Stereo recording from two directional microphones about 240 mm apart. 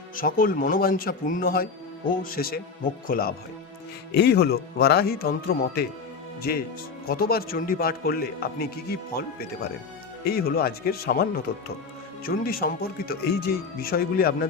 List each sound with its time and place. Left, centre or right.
0.2 s a man's voice: left